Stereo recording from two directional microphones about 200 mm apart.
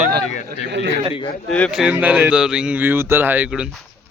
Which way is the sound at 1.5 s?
5° left (ahead or behind).